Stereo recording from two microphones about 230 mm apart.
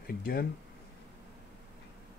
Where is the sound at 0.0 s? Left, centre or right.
Left.